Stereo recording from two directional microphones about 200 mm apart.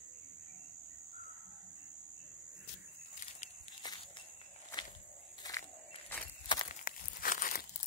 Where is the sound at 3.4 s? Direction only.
35° left (ahead or behind).